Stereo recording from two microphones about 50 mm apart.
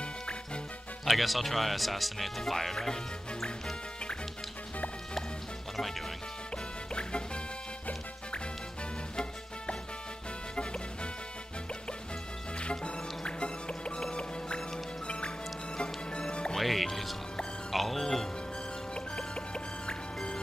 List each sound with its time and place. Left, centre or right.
1.0 s speech: centre
5.8 s music: centre
6.5 s music: centre
9.1 s music: centre
12.5 s music: left
15.0 s music: centre
16.5 s music: centre
18.9 s music: centre